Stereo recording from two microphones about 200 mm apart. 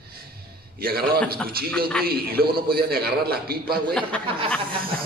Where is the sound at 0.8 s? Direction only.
50° right (ahead or behind).